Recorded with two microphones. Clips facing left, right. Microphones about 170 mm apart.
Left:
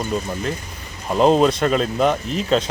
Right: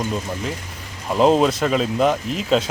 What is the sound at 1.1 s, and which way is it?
Speech, 5° right (ahead or behind).